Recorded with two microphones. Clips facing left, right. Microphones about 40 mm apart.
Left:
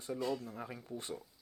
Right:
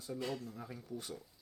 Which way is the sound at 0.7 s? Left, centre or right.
Left.